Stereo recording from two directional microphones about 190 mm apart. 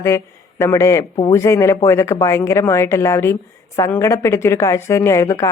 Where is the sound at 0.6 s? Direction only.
15° left (ahead or behind).